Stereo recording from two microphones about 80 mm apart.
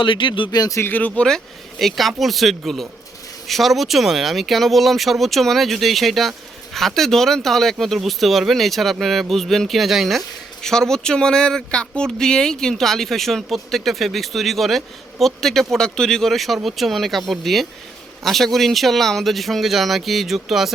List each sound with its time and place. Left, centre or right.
0.0 s speech: left
0.5 s speech: left
0.8 s speech: left
1.8 s speech: centre